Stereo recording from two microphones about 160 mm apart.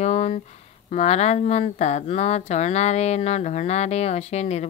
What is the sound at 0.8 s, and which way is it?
A woman's voice, 40° left (ahead or behind).